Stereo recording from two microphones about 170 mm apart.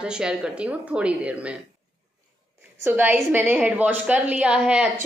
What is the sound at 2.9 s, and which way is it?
A woman's voice, 10° right (ahead or behind).